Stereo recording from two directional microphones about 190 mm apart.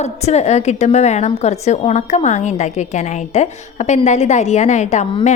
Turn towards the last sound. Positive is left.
turn(degrees=40)  # may be behind; listen again after turning